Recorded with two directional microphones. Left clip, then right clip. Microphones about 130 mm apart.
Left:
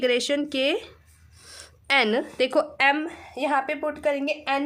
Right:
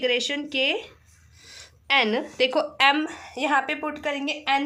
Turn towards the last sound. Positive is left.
turn(degrees=50)  # may be behind; listen again after turning